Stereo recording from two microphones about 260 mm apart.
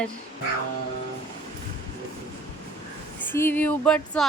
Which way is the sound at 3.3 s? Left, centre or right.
Centre.